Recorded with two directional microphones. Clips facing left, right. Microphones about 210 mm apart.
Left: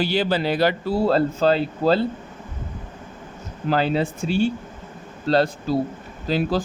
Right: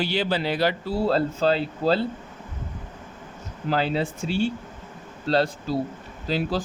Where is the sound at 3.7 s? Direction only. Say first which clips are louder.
Left 3 dB; 50° left (ahead or behind).